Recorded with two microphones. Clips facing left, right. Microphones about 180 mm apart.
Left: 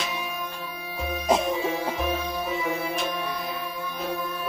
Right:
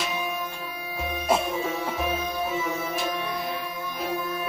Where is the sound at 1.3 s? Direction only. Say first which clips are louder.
Left 2 dB; 15° left (ahead or behind).